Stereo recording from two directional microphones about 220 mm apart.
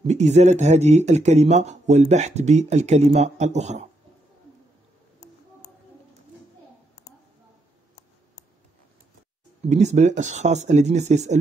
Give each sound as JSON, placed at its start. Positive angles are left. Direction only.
{"t": 0.0, "sound": "speech", "side_deg": -30}
{"t": 9.7, "sound": "speech", "side_deg": -30}